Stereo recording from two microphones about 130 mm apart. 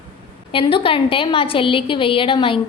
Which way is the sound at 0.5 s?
45° left (ahead or behind).